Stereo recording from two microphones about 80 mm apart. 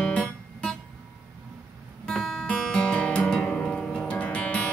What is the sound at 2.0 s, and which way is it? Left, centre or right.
Music, centre.